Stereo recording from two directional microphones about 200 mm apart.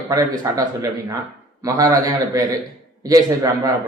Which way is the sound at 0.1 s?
15° right (ahead or behind).